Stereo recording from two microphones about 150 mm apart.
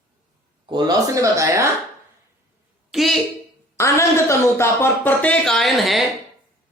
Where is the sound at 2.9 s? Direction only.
Centre (ahead or behind).